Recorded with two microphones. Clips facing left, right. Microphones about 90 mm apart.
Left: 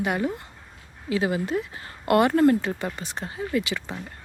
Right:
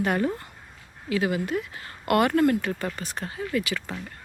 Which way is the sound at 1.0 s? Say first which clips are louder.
Left 1 dB; 25° left (ahead or behind).